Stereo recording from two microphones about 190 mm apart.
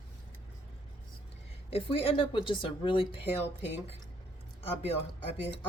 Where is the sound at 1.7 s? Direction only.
30° left (ahead or behind).